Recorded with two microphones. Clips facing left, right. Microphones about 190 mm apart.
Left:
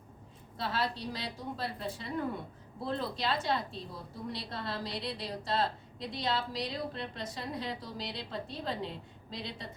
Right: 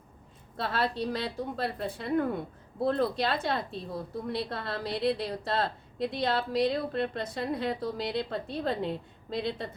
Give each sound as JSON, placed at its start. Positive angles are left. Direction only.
{"t": 0.5, "sound": "a woman's voice", "side_deg": -55}